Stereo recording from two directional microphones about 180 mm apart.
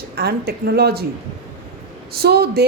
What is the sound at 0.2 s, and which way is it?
Speech, 60° right (ahead or behind).